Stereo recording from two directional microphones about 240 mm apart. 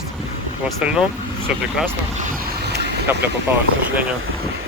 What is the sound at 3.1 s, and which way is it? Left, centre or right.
Speech, centre.